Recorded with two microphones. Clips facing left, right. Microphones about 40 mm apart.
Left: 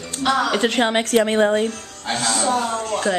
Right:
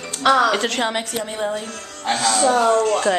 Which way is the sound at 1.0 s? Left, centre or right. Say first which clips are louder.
Left 9 dB; left.